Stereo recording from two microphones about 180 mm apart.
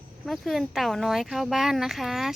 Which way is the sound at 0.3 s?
Centre (ahead or behind).